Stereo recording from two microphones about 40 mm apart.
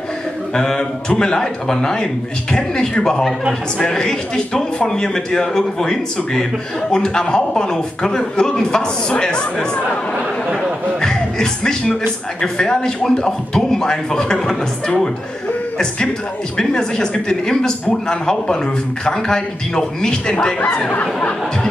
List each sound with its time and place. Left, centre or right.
0.6 s a man's voice: centre
11.0 s speech: centre
16.5 s a man's voice: centre